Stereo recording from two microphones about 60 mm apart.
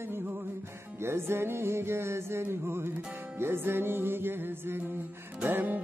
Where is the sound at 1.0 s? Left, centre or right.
Right.